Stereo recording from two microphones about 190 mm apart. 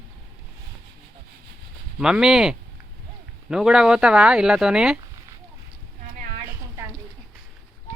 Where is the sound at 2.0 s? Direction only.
5° right (ahead or behind).